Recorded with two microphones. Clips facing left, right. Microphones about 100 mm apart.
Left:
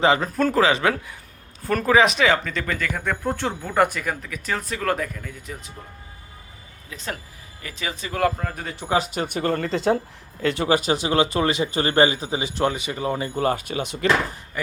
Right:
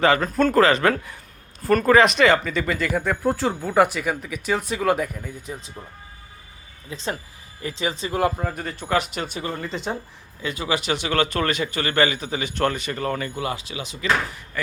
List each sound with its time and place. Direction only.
0.0 s speech: 25° left (ahead or behind)
0.3 s speech: 10° left (ahead or behind)
1.6 s speech: 5° right (ahead or behind)
2.5 s speech: 10° right (ahead or behind)
6.9 s speech: 25° right (ahead or behind)
8.4 s speech: 5° right (ahead or behind)
9.3 s speech: 60° left (ahead or behind); by 10.0 s 90° left
10.4 s speech: 65° left (ahead or behind)
10.7 s speech: 40° left (ahead or behind)
12.6 s speech: 15° left (ahead or behind)
13.3 s speech: 40° left (ahead or behind)